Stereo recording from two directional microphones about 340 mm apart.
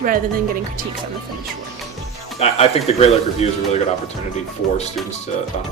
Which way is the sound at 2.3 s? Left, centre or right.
Centre.